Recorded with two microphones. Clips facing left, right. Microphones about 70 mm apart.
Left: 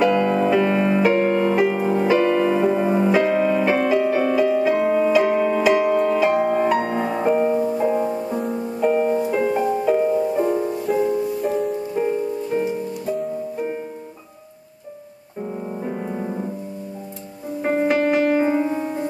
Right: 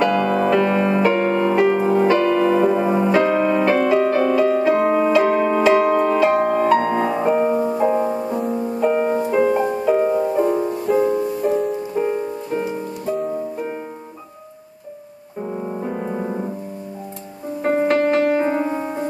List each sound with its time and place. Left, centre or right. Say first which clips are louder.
0.0 s music: even; centre
2.0 s music: right 1 dB; centre
4.6 s music: right 2 dB; centre
5.1 s music: right 1 dB; centre
7.7 s music: right 2 dB; centre
9.0 s music: even; right
9.3 s music: right 4 dB; centre
10.0 s music: right 1 dB; right
10.4 s music: right 2 dB; centre
11.0 s music: right 2 dB; right
11.4 s music: right 2 dB; centre
15.4 s music: right 2 dB; centre
17.6 s music: right 2 dB; centre
18.6 s piano: even; right